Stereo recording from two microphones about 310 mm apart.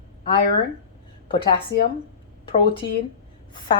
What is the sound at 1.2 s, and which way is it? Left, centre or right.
Speech, centre.